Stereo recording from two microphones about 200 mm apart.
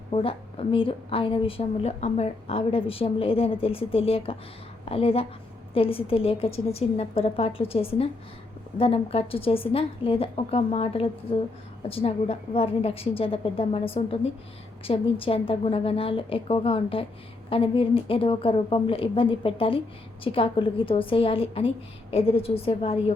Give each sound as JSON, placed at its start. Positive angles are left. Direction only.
{"t": 0.1, "sound": "a woman's voice", "side_deg": 25}